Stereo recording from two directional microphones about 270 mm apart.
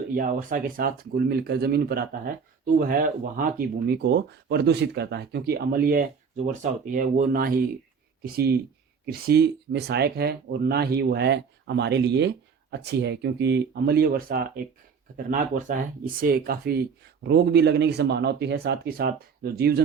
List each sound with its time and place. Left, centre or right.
0.1 s speech: right